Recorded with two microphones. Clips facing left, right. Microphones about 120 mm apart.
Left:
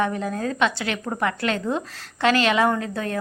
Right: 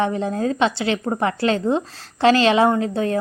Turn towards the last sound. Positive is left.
turn(degrees=-30)  # may be behind; listen again after turning